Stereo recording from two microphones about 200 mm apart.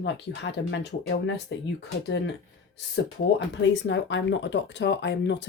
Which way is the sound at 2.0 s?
60° left (ahead or behind).